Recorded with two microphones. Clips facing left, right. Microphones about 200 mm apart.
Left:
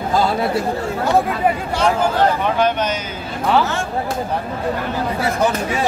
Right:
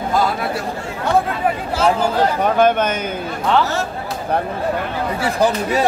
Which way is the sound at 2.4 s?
50° right (ahead or behind).